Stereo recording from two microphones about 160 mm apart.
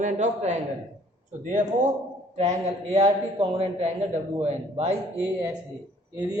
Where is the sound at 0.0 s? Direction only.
45° right (ahead or behind).